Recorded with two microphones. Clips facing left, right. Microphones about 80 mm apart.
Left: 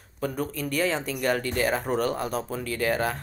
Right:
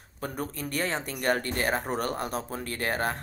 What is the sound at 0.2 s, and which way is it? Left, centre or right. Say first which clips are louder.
Speech: left 4 dB; right.